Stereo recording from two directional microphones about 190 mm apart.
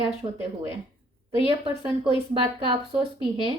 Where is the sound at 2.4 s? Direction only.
25° right (ahead or behind).